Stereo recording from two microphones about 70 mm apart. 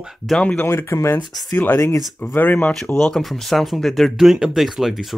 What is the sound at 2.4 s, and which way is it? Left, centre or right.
Speech, left.